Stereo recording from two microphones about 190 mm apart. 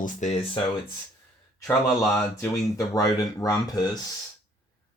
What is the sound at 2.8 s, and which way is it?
Speech, 20° left (ahead or behind).